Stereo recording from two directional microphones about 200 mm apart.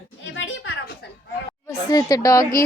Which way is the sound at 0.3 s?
70° left (ahead or behind).